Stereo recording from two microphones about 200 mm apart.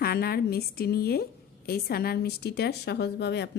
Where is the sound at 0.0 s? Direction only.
50° left (ahead or behind).